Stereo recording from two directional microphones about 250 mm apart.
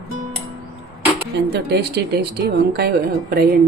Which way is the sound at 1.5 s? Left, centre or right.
Right.